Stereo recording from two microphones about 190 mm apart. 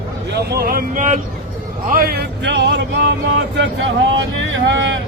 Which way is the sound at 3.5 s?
70° right (ahead or behind).